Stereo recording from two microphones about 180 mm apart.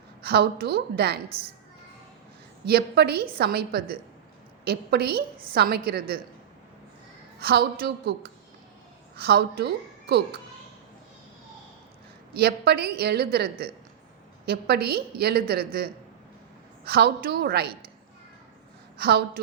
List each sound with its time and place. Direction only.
0.3 s a woman's voice: 60° right (ahead or behind)
2.6 s a woman's voice: 60° right (ahead or behind)
7.3 s a woman's voice: 60° right (ahead or behind)
12.3 s a woman's voice: 60° right (ahead or behind)
18.9 s a woman's voice: 60° right (ahead or behind)